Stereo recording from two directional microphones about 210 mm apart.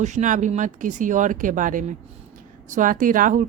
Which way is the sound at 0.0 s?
35° right (ahead or behind).